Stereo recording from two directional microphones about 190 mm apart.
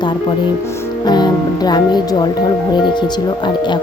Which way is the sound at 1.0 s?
20° left (ahead or behind).